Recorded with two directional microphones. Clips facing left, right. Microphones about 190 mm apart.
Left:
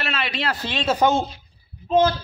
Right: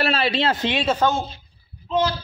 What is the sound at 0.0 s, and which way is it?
Speech, 30° right (ahead or behind).